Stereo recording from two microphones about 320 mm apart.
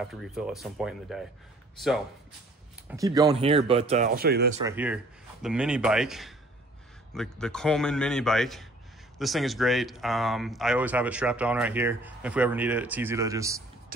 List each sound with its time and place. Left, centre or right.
0.0 s speech: centre
2.9 s speech: centre; by 4.5 s right
4.6 s speech: centre